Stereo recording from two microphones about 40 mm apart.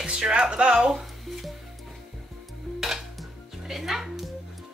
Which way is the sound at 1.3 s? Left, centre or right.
Centre.